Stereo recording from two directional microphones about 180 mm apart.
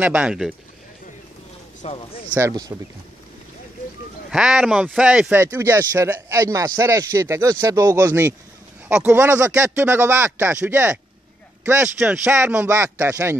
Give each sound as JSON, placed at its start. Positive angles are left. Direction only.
{"t": 0.0, "sound": "speech", "side_deg": -5}
{"t": 1.8, "sound": "speech", "side_deg": 35}
{"t": 2.3, "sound": "speech", "side_deg": -15}
{"t": 4.3, "sound": "speech", "side_deg": -5}
{"t": 5.4, "sound": "speech", "side_deg": -15}